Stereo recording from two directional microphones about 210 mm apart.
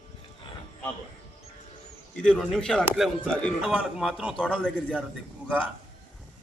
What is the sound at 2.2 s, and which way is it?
A man's voice, 5° left (ahead or behind).